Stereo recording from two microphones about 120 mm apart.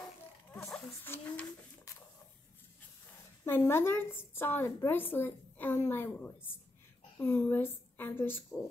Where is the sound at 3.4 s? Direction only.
20° left (ahead or behind).